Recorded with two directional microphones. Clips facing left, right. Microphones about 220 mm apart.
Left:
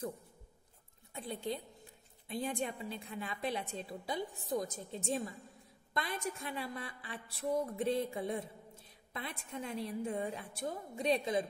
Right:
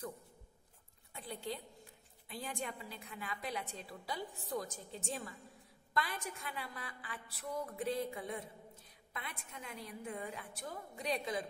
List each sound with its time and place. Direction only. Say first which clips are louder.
1.1 s a woman's voice: left 4 dB; 25° left (ahead or behind)